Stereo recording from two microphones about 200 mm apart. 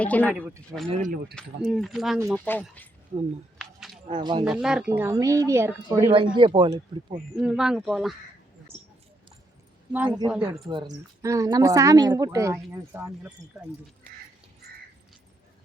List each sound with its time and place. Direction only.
0.0 s speech: 5° left (ahead or behind)
0.9 s speech: 35° right (ahead or behind)
1.4 s speech: centre (ahead or behind)
3.6 s a sound: centre (ahead or behind)
4.1 s speech: 20° right (ahead or behind)
4.4 s speech: 5° right (ahead or behind)
6.3 s speech: 25° right (ahead or behind)
7.3 s speech: 5° right (ahead or behind)
8.7 s a sound: 25° left (ahead or behind)
10.1 s speech: 20° right (ahead or behind)